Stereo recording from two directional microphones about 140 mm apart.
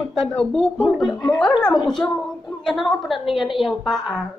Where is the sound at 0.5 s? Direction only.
Centre (ahead or behind).